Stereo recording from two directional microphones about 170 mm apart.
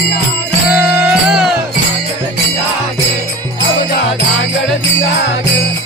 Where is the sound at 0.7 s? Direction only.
10° right (ahead or behind).